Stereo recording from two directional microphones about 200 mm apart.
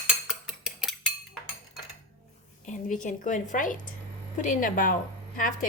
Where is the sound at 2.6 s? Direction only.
40° left (ahead or behind).